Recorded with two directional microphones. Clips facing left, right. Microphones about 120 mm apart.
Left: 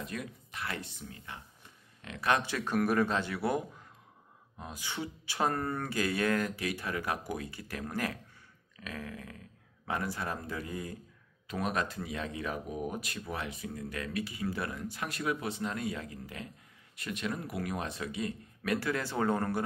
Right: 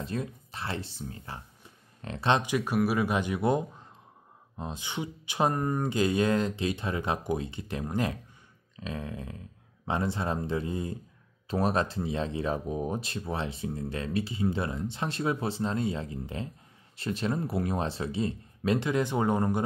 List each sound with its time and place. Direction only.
0.0 s speech: 30° right (ahead or behind)
2.4 s speech: 15° right (ahead or behind)